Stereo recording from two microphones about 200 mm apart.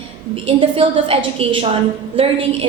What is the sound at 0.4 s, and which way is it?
A woman's voice, 30° right (ahead or behind).